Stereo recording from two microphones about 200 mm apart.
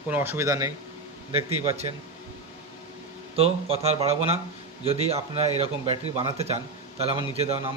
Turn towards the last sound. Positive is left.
turn(degrees=-30)  # may be behind; listen again after turning